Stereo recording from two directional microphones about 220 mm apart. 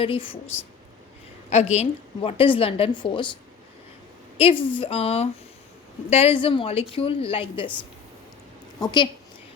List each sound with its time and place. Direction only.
0.0 s a woman's voice: 25° left (ahead or behind)
1.5 s a woman's voice: 30° left (ahead or behind)
4.4 s a woman's voice: 25° left (ahead or behind)
8.8 s a woman's voice: 20° left (ahead or behind)